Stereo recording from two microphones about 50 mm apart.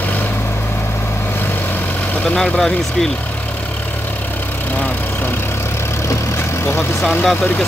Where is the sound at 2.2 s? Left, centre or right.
Centre.